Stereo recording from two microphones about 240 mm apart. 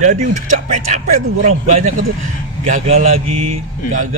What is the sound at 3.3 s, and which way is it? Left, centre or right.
Speech, right.